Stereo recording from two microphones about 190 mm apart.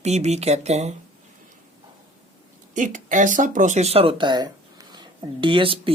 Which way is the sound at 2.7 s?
40° right (ahead or behind).